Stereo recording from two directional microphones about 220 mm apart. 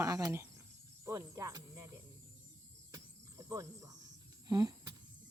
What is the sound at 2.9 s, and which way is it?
Cricket, 15° right (ahead or behind).